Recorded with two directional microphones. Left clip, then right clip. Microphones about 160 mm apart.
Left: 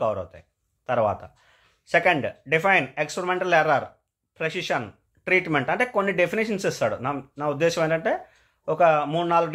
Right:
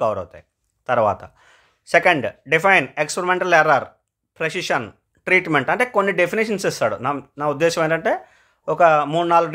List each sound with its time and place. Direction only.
0.0 s speech: 30° right (ahead or behind)